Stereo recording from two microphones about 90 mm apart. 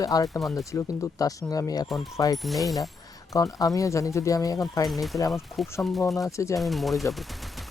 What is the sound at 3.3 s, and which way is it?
Speech, 40° left (ahead or behind).